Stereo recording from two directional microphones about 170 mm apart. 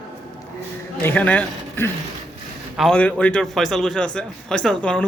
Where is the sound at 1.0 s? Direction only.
10° left (ahead or behind).